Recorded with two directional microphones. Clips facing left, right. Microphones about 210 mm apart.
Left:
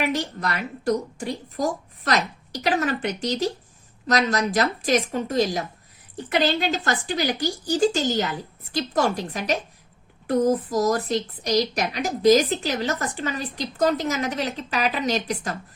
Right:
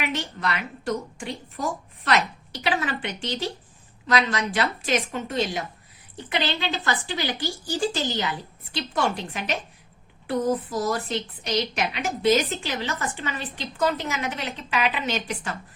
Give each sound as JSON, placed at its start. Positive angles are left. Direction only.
{"t": 0.0, "sound": "a woman's voice", "side_deg": 40}